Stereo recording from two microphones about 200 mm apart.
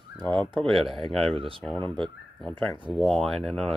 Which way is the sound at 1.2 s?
25° right (ahead or behind).